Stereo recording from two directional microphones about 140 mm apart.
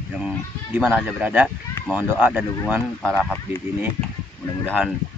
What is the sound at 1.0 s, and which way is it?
Speech, 10° right (ahead or behind).